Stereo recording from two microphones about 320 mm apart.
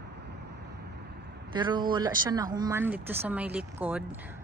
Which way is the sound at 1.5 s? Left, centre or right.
Centre.